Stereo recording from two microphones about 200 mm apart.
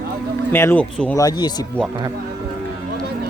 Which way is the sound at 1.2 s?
20° left (ahead or behind).